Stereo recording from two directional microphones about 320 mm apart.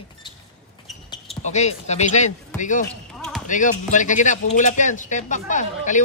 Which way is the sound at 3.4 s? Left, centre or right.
Left.